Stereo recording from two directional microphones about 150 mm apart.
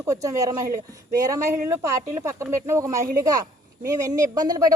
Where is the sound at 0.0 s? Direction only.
20° right (ahead or behind).